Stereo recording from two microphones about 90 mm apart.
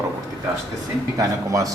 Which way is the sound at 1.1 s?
40° right (ahead or behind).